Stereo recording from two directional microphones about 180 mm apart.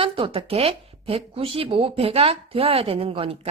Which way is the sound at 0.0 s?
30° right (ahead or behind).